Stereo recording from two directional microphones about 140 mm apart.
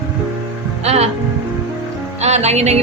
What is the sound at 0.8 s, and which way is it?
Speech, 50° right (ahead or behind).